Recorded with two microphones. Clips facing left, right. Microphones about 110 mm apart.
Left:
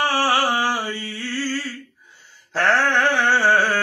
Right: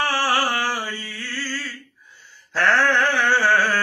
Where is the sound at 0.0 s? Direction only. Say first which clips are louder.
Left 2 dB; 25° left (ahead or behind).